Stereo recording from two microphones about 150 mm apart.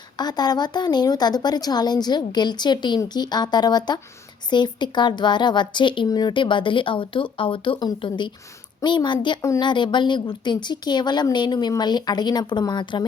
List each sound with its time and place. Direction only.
0.2 s a woman's voice: 25° left (ahead or behind)